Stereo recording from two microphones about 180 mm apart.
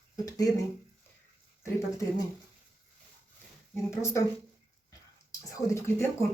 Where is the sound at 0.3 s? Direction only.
20° left (ahead or behind).